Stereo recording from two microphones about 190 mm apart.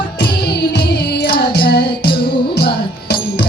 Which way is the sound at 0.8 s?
55° left (ahead or behind).